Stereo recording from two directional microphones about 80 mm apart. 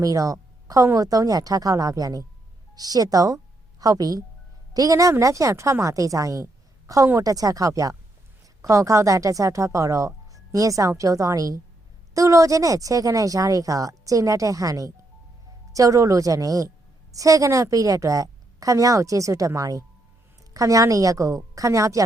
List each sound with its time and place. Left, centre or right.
0.0 s a woman's voice: right